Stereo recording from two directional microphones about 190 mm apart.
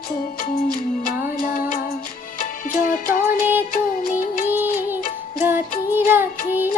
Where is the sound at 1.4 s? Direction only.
45° left (ahead or behind).